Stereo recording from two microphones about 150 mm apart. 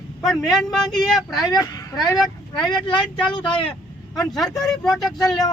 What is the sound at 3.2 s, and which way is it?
Speech, 30° left (ahead or behind).